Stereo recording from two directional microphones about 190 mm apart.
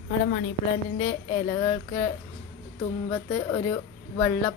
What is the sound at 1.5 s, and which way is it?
Speech, 20° left (ahead or behind).